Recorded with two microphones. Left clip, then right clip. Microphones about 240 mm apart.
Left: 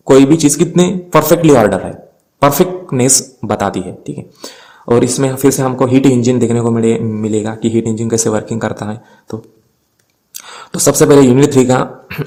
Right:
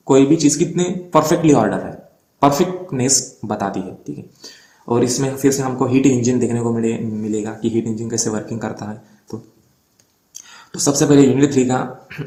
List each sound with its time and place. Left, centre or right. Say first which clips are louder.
0.0 s speech: left 5 dB; left